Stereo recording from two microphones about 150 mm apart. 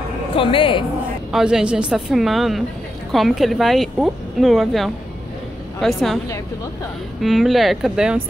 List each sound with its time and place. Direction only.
0.4 s speech: 35° left (ahead or behind)
1.3 s speech: 5° right (ahead or behind)
7.2 s speech: centre (ahead or behind)